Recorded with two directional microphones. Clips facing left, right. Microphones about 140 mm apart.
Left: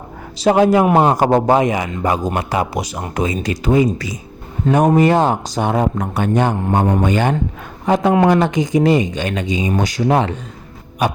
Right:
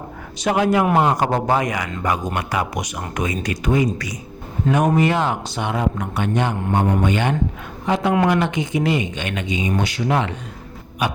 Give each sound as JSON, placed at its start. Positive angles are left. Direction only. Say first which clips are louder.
{"t": 0.3, "sound": "a man's voice", "louder": "left 5 dB", "side_deg": 30}
{"t": 4.9, "sound": "a man's voice", "louder": "left 5 dB", "side_deg": 40}